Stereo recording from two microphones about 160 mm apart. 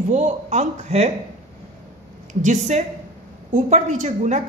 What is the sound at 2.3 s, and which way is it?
A man's voice, 50° right (ahead or behind).